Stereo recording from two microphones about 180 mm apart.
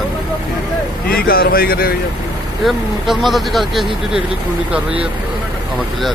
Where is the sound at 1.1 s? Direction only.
55° left (ahead or behind).